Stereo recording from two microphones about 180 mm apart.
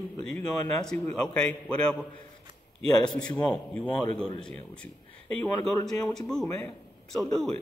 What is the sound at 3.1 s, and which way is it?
Speech, 5° left (ahead or behind).